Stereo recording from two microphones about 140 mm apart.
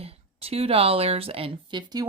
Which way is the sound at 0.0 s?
45° right (ahead or behind).